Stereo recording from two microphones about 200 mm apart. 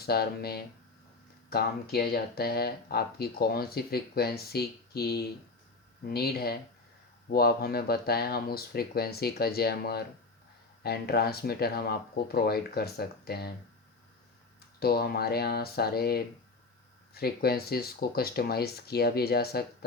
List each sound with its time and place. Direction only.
0.0 s speech: 50° left (ahead or behind)
14.8 s speech: 50° left (ahead or behind)